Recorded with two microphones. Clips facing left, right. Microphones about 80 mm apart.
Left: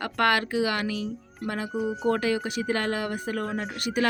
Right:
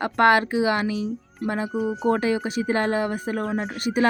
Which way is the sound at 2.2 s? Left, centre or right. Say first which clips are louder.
Right 3 dB; right.